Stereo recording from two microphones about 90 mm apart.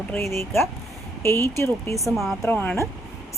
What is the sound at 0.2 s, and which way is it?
Speech, 30° left (ahead or behind).